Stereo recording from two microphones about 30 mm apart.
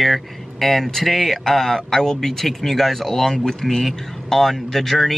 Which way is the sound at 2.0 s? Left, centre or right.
Centre.